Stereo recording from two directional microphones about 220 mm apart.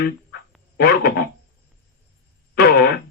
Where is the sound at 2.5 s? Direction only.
45° left (ahead or behind).